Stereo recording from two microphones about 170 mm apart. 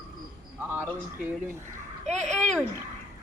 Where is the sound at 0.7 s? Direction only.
10° right (ahead or behind).